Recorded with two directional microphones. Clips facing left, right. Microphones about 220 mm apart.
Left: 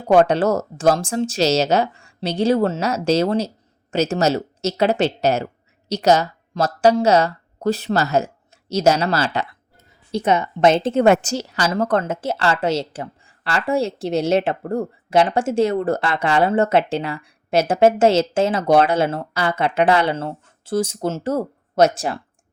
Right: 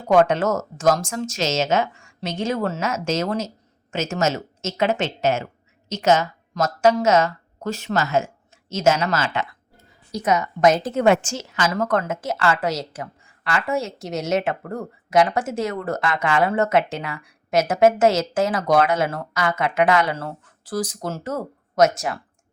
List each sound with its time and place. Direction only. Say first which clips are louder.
0.0 s a woman's voice: left 2 dB; 35° left (ahead or behind)
11.0 s a woman's voice: left 1 dB; 40° left (ahead or behind)